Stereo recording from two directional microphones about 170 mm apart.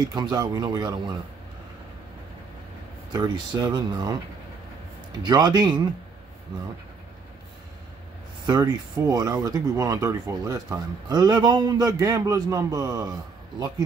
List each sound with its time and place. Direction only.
0.1 s speech: 25° right (ahead or behind)
3.1 s speech: 25° right (ahead or behind)
5.2 s speech: 25° right (ahead or behind)
8.5 s speech: 25° right (ahead or behind)